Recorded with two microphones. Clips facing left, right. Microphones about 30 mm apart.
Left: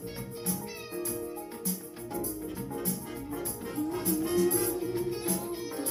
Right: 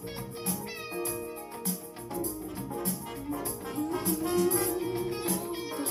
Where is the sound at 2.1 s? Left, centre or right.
Right.